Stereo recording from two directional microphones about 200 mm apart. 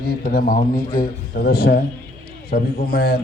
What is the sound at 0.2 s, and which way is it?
A man's voice, 45° left (ahead or behind).